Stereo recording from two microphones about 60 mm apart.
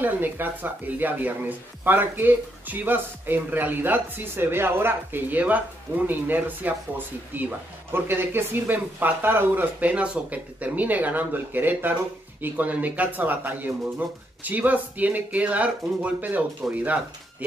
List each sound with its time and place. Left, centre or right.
0.0 s speech: right